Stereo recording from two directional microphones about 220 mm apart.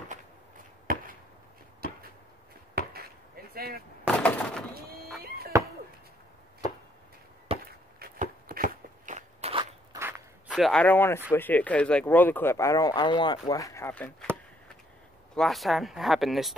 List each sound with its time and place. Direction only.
0.9 s chop: 40° right (ahead or behind)
3.5 s a sound: 45° right (ahead or behind)
4.1 s a sound: 5° left (ahead or behind)
5.5 s chop: 15° right (ahead or behind)
7.5 s chop: 25° right (ahead or behind)
8.0 s crunch: 40° right (ahead or behind)
9.9 s speech: 5° right (ahead or behind); by 14.1 s 10° left (ahead or behind)
15.3 s speech: centre (ahead or behind)